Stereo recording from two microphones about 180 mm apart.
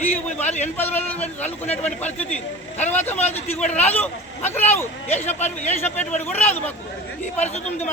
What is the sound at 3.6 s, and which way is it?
Speech, 40° left (ahead or behind).